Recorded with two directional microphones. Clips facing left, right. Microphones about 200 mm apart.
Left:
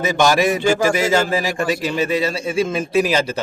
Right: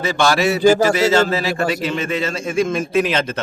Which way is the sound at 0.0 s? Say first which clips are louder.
Left 1 dB; 20° left (ahead or behind).